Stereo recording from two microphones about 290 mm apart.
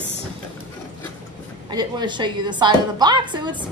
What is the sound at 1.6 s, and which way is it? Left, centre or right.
A woman's voice, centre.